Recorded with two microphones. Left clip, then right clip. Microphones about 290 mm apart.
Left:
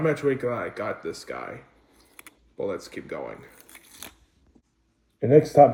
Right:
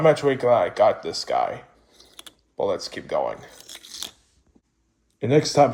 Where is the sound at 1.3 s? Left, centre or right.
Right.